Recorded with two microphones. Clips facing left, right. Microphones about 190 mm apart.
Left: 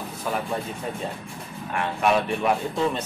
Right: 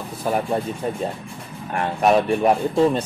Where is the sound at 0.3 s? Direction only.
40° right (ahead or behind).